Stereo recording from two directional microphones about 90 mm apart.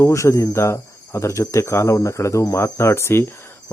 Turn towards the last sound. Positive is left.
turn(degrees=30)  # may be behind; listen again after turning